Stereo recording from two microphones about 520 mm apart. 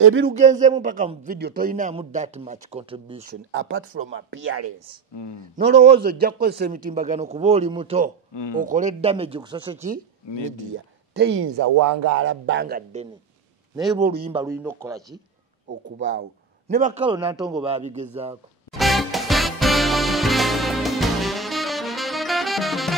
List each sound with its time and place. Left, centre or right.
0.0 s a man's voice: right
5.1 s speech: left
5.6 s a man's voice: centre
11.1 s a man's voice: right; by 15.1 s centre
16.0 s a man's voice: centre
18.7 s music: centre